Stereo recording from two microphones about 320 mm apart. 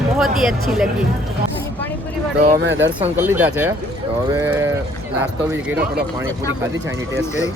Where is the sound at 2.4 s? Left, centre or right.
Right.